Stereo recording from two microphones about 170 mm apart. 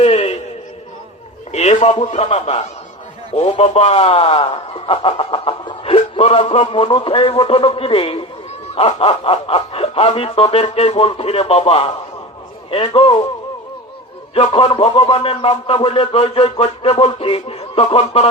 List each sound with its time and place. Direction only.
0.0 s a sound: 35° left (ahead or behind)
1.5 s a man's voice: 40° left (ahead or behind)
14.3 s speech: 35° left (ahead or behind)